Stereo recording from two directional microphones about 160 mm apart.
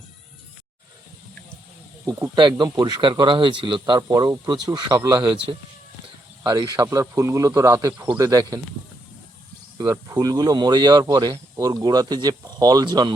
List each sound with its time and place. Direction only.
2.0 s speech: 15° right (ahead or behind)
2.3 s speech: 30° right (ahead or behind)
6.4 s speech: 25° right (ahead or behind)
9.7 s speech: 20° right (ahead or behind)